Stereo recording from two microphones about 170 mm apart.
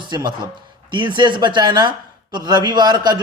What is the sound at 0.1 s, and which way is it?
A man's voice, 25° right (ahead or behind).